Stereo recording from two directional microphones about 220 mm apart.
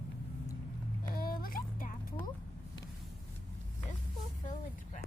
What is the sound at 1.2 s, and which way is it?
Speech, 40° left (ahead or behind).